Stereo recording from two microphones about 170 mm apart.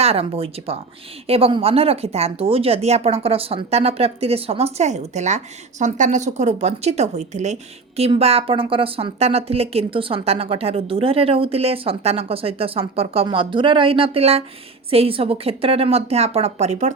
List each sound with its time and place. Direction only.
0.0 s a woman's voice: 35° right (ahead or behind)